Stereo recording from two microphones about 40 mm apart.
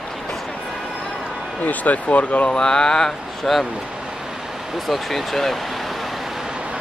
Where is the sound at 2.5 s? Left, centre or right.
Centre.